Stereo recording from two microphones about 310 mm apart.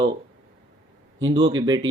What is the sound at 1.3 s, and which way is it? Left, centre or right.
Speech, centre.